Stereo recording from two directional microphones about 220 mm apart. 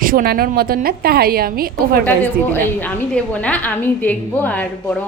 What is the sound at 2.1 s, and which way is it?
A woman's voice, 10° left (ahead or behind).